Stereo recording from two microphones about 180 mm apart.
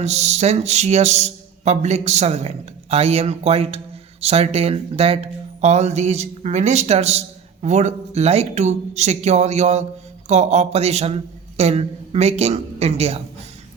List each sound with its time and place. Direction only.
0.0 s speech: 40° right (ahead or behind)